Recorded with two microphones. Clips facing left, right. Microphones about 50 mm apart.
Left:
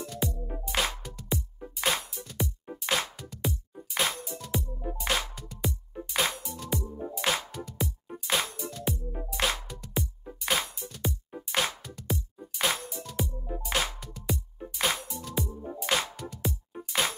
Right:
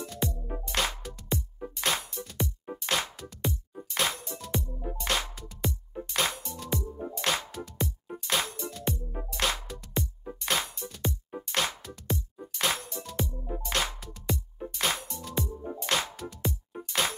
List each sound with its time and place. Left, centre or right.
0.0 s music: centre
2.4 s music: centre
2.8 s music: centre